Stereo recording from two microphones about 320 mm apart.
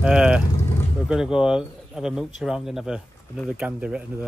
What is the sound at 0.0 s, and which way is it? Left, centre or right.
Speech, centre.